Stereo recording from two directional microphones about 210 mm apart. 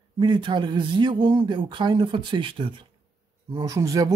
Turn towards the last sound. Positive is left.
turn(degrees=-15)  # may be behind; listen again after turning